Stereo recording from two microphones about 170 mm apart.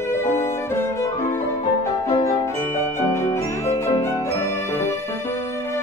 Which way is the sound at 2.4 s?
15° left (ahead or behind).